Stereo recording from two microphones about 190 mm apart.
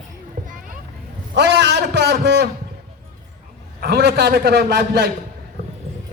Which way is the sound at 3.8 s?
60° right (ahead or behind).